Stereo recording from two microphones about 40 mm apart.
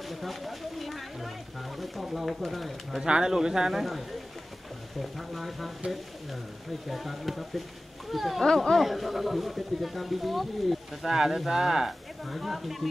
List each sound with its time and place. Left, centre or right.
0.1 s a sound: centre
1.8 s speech: centre
3.0 s speech: centre
5.1 s speech: centre
6.9 s speech: centre